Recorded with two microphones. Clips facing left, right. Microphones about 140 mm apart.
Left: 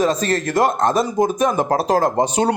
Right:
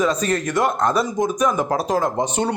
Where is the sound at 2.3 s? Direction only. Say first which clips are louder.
Left 4 dB; 90° left.